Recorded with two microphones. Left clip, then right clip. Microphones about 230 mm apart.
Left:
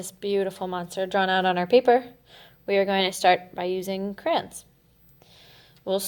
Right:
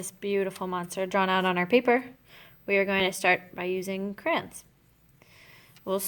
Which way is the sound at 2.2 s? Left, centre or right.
Right.